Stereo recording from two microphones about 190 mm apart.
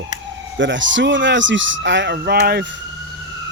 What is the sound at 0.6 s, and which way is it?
Speech, 75° right (ahead or behind).